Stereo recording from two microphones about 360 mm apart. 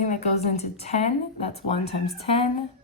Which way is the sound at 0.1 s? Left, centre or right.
Centre.